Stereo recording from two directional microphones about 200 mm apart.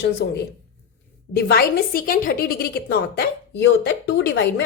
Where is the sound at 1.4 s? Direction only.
50° left (ahead or behind).